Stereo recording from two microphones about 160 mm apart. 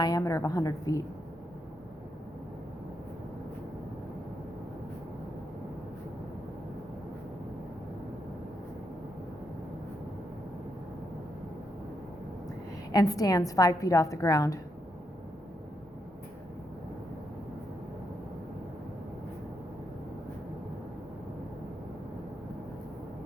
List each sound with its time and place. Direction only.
0.0 s a woman's voice: 20° left (ahead or behind)
12.9 s a woman's voice: 25° left (ahead or behind)